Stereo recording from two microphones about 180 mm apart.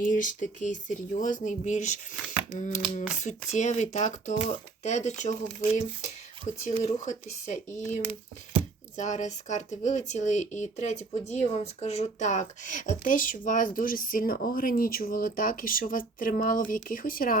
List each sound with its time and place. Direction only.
0.0 s speech: 50° left (ahead or behind)